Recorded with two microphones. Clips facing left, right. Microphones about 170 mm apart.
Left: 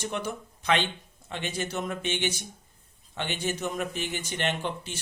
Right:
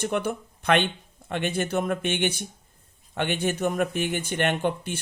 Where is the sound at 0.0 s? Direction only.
55° right (ahead or behind).